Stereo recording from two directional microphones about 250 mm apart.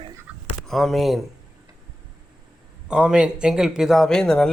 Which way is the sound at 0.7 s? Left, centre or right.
Centre.